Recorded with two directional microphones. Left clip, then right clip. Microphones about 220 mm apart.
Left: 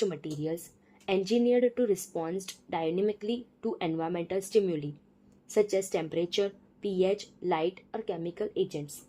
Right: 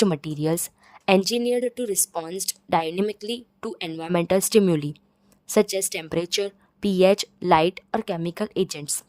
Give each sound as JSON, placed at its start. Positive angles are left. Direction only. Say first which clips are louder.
{"t": 0.0, "sound": "a woman's voice", "louder": "right 8 dB", "side_deg": -40}